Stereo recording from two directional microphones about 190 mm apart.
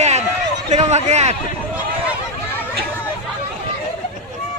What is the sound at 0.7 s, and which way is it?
Speech, 35° right (ahead or behind).